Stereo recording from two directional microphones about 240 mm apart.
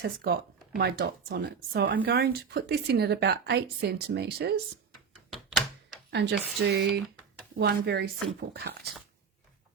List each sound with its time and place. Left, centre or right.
0.0 s a woman's voice: right
5.3 s door: centre
6.1 s speech: right
6.3 s speech: centre
6.6 s a woman's voice: right
8.8 s speech: centre